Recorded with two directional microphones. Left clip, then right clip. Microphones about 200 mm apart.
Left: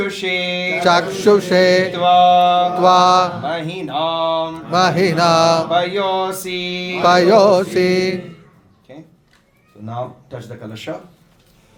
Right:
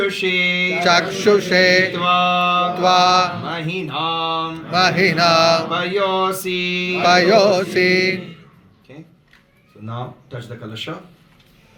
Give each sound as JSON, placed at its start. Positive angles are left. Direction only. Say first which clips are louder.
{"t": 0.0, "sound": "mantra", "louder": "right 2 dB", "side_deg": 25}
{"t": 1.9, "sound": "mantra", "louder": "left 5 dB", "side_deg": 25}
{"t": 3.4, "sound": "mantra", "louder": "left 2 dB", "side_deg": 25}
{"t": 4.7, "sound": "mantra", "louder": "left 1 dB", "side_deg": 35}
{"t": 5.7, "sound": "mantra", "louder": "left 2 dB", "side_deg": 25}
{"t": 7.0, "sound": "mantra", "louder": "left 2 dB", "side_deg": 35}